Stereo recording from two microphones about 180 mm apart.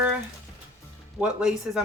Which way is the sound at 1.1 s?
5° right (ahead or behind).